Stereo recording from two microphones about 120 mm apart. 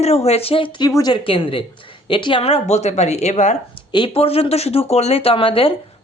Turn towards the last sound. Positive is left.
turn(degrees=50)  # may be behind; listen again after turning